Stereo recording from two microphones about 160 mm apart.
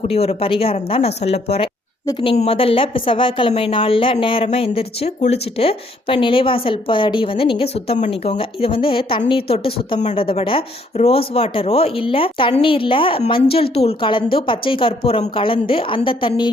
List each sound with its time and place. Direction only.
0.0 s a woman's voice: 40° left (ahead or behind)
2.0 s a woman's voice: 30° left (ahead or behind)
2.3 s a woman's voice: 40° left (ahead or behind)